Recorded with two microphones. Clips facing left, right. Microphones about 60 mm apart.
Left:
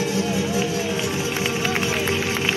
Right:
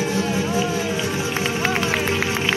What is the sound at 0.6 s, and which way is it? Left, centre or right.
Run, centre.